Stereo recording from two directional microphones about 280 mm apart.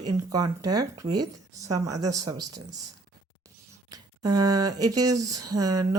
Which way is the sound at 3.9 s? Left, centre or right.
Centre.